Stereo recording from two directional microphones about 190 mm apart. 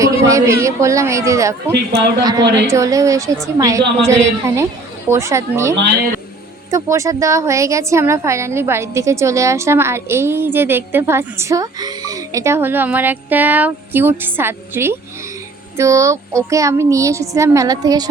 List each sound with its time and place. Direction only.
0.0 s a woman's voice: 15° right (ahead or behind)